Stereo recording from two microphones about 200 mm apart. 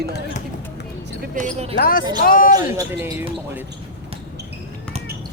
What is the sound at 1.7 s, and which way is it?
Speech, 45° left (ahead or behind).